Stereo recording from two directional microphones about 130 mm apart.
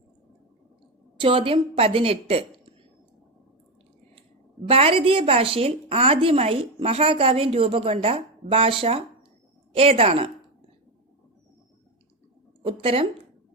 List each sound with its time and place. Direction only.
1.2 s a woman's voice: 40° right (ahead or behind)
4.7 s a woman's voice: 45° right (ahead or behind)
12.6 s a woman's voice: 45° right (ahead or behind)